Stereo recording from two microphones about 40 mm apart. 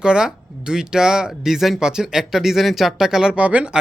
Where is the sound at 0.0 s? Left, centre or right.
Centre.